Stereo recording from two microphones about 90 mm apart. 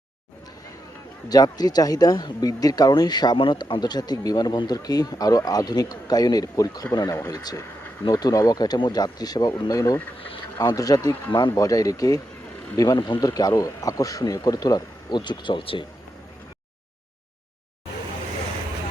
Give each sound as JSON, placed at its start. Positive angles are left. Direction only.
{"t": 1.3, "sound": "speech", "side_deg": 45}
{"t": 3.3, "sound": "speech", "side_deg": 75}
{"t": 3.8, "sound": "speech", "side_deg": 50}